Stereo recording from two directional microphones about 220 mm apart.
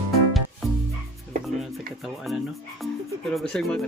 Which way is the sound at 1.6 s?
Centre (ahead or behind).